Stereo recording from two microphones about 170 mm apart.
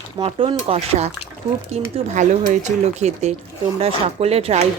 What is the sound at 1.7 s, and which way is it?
Speech, 45° right (ahead or behind).